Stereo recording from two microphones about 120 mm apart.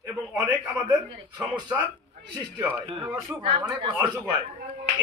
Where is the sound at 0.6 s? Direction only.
10° right (ahead or behind).